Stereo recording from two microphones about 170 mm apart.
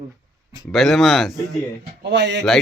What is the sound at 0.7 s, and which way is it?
Speech, centre (ahead or behind).